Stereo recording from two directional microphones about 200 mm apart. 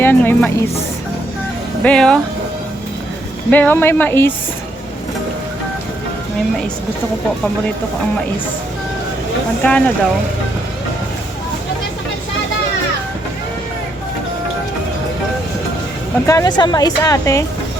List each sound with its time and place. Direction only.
0.0 s music: 10° left (ahead or behind)
1.8 s speech: 5° left (ahead or behind)
3.5 s speech: 10° left (ahead or behind)
9.6 s speech: 5° left (ahead or behind)
16.2 s speech: 15° left (ahead or behind)